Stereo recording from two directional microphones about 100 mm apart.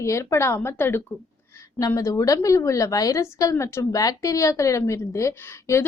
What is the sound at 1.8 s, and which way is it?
A woman's voice, 35° left (ahead or behind).